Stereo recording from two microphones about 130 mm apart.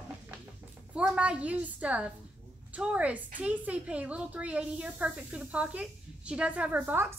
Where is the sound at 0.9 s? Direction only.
10° right (ahead or behind).